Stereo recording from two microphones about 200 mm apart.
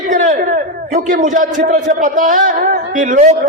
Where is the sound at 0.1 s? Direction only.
40° right (ahead or behind).